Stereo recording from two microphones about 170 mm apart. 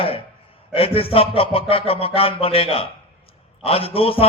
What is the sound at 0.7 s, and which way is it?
Music, 35° left (ahead or behind).